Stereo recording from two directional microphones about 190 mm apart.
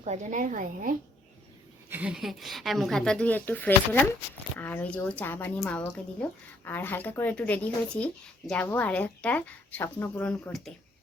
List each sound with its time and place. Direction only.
0.0 s a woman's voice: 40° right (ahead or behind)
1.9 s a woman's voice: 5° right (ahead or behind)